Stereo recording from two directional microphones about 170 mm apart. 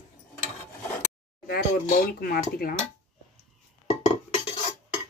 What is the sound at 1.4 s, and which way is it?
Speech, 65° left (ahead or behind).